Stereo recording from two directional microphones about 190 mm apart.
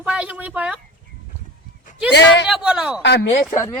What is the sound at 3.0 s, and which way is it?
Speech, 65° left (ahead or behind).